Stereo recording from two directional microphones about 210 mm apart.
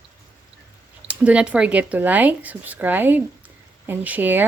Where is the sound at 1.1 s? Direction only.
5° right (ahead or behind).